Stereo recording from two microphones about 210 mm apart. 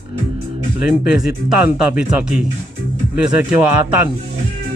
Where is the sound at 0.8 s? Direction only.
5° right (ahead or behind).